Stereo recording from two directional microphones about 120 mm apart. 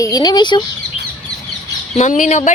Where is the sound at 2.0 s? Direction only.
90° left.